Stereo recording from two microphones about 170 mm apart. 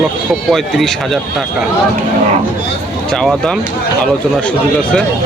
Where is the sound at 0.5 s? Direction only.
Centre (ahead or behind).